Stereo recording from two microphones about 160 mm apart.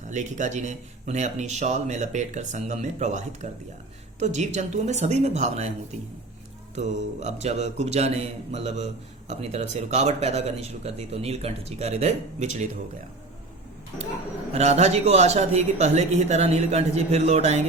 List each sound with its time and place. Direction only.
0.1 s speech: 50° right (ahead or behind)
14.5 s speech: 45° right (ahead or behind)